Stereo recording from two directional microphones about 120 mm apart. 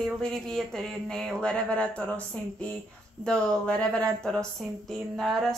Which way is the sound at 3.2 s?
10° left (ahead or behind).